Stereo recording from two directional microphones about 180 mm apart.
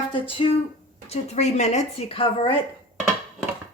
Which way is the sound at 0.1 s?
30° left (ahead or behind).